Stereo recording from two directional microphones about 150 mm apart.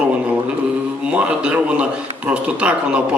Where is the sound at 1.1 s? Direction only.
10° right (ahead or behind).